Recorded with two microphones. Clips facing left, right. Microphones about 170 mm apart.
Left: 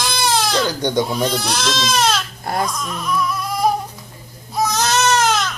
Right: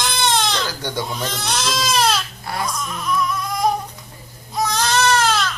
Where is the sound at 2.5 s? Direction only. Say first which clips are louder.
Left 6 dB; 45° left (ahead or behind).